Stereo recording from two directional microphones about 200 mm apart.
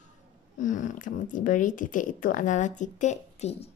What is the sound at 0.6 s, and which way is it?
A woman's voice, 40° left (ahead or behind).